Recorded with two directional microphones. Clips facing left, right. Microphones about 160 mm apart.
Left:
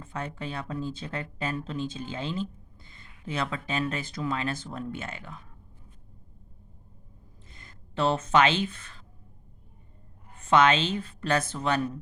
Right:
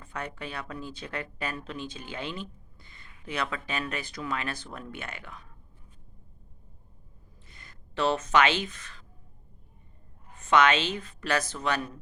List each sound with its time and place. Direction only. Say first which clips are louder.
0.0 s speech: left 2 dB; 25° left (ahead or behind)
7.7 s speech: left 1 dB; 30° left (ahead or behind)
10.4 s speech: left 1 dB; 30° left (ahead or behind)